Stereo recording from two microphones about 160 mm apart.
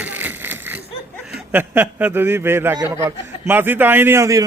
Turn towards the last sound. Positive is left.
turn(degrees=-15)  # may be behind; listen again after turning